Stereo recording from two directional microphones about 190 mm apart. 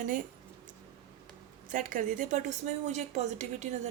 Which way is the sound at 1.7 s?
45° right (ahead or behind).